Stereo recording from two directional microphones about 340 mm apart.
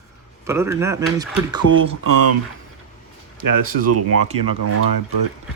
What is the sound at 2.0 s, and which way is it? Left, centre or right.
Speech, right.